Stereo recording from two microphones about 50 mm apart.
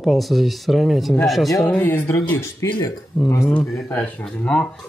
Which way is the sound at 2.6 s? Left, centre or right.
Left.